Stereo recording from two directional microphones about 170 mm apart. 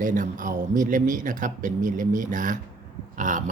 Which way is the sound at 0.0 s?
50° right (ahead or behind).